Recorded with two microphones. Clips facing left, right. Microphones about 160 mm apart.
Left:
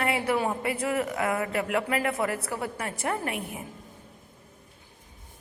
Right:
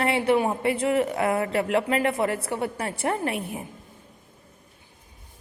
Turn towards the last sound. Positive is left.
turn(degrees=-30)  # may be behind; listen again after turning